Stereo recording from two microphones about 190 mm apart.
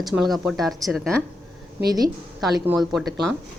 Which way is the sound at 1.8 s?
20° right (ahead or behind).